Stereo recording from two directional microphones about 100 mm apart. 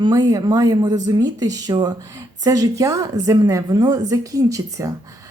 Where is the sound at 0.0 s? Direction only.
40° right (ahead or behind).